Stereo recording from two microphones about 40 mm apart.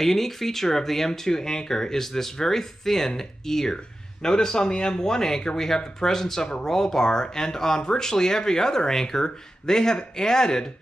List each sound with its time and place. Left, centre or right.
0.0 s speech: centre